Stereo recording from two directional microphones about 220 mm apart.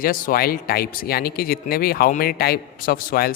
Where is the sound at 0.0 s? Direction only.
40° left (ahead or behind).